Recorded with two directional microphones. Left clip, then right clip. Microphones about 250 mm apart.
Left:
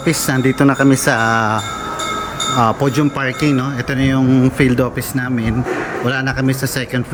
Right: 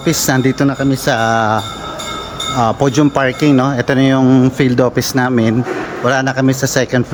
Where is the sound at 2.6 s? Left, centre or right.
Centre.